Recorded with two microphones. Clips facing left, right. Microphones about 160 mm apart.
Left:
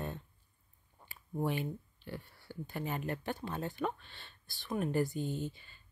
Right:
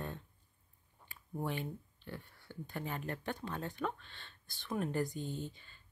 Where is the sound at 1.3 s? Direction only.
10° left (ahead or behind).